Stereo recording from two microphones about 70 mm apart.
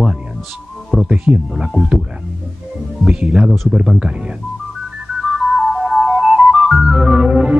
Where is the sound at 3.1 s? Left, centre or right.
Centre.